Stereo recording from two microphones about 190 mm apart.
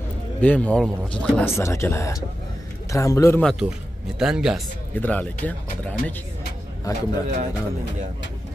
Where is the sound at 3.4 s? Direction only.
Centre (ahead or behind).